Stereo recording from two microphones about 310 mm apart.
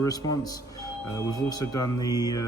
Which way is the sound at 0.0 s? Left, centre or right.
Centre.